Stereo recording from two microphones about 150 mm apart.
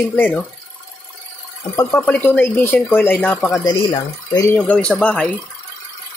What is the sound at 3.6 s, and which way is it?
Speech, 25° left (ahead or behind).